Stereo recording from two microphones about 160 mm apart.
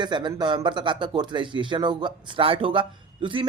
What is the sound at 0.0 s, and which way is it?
Speech, 30° right (ahead or behind).